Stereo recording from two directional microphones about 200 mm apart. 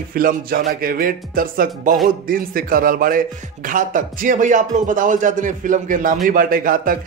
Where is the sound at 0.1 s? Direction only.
45° right (ahead or behind).